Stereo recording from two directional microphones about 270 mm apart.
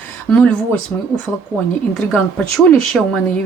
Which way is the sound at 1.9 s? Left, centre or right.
Centre.